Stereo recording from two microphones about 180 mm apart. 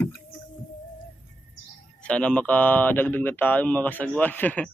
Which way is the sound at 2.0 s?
5° left (ahead or behind).